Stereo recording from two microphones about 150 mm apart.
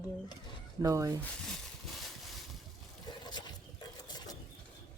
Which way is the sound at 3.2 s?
30° left (ahead or behind).